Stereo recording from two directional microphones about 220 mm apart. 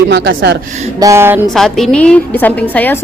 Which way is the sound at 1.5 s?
Centre (ahead or behind).